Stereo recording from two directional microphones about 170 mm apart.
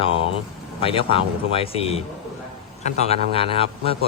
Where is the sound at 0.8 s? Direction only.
30° left (ahead or behind).